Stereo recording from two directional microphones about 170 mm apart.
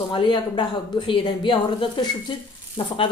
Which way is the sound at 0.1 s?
25° left (ahead or behind).